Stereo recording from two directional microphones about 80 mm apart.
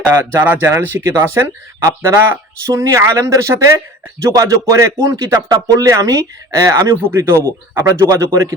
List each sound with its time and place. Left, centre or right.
0.4 s speech: right
4.3 s speech: right